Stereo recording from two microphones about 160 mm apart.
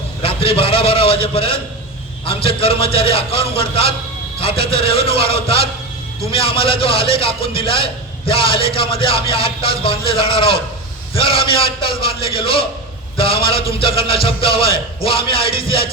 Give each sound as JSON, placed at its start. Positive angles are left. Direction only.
{"t": 0.2, "sound": "a man's voice", "side_deg": 35}